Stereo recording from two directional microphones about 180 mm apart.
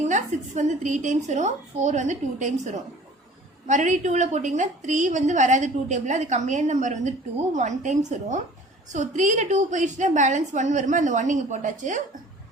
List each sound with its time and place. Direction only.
0.0 s a woman's voice: 40° right (ahead or behind)
3.7 s a woman's voice: 40° right (ahead or behind)